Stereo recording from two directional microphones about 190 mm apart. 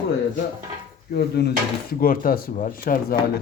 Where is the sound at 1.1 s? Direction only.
60° left (ahead or behind).